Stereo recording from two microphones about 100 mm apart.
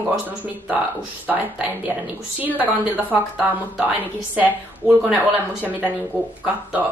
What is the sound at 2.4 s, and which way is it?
A woman's voice, 15° right (ahead or behind).